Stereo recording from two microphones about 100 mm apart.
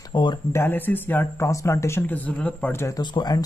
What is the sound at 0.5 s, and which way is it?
Speech, 20° left (ahead or behind).